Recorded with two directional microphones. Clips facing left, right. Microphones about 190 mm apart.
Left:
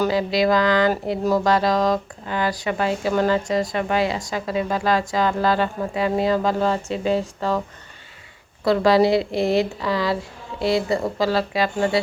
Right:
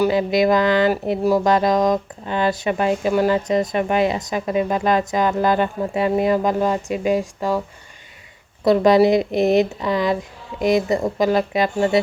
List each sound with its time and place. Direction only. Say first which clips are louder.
0.0 s speech: right 3 dB; 20° right (ahead or behind)
8.6 s speech: right 3 dB; 20° right (ahead or behind)